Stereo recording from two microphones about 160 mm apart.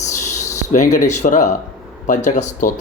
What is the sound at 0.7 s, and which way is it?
Speech, 50° left (ahead or behind).